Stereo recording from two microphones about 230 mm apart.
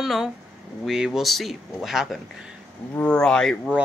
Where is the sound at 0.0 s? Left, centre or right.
Centre.